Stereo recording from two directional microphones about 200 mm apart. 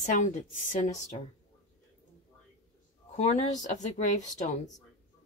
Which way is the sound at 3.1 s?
35° left (ahead or behind).